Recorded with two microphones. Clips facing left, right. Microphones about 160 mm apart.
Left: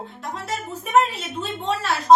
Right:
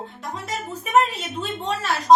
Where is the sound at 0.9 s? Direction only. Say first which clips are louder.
Even; centre (ahead or behind).